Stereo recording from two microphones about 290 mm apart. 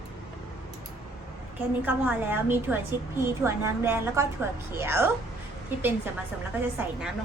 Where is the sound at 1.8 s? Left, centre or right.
Centre.